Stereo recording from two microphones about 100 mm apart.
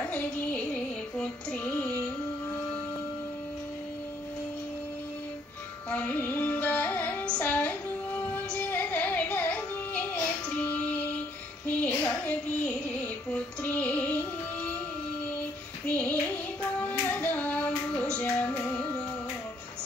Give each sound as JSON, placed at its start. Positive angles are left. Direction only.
{"t": 0.0, "sound": "music", "side_deg": 15}
{"t": 5.9, "sound": "music", "side_deg": 15}
{"t": 15.9, "sound": "child singing", "side_deg": 15}
{"t": 16.8, "sound": "music", "side_deg": 20}
{"t": 18.6, "sound": "carnatic music", "side_deg": 10}